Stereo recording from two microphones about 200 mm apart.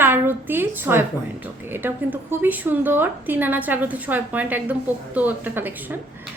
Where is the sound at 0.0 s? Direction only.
10° right (ahead or behind).